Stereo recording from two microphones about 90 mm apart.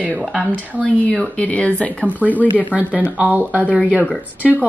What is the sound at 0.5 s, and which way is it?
Speech, 20° right (ahead or behind).